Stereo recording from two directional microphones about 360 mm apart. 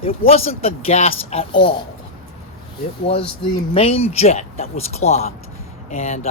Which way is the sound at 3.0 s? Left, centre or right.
Centre.